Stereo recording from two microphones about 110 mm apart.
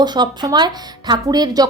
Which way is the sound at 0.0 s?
40° right (ahead or behind).